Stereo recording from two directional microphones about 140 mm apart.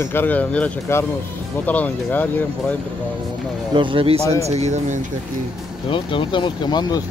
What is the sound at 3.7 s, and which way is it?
Speech, 35° right (ahead or behind).